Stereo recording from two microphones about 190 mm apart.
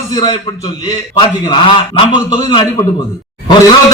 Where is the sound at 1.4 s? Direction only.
25° left (ahead or behind).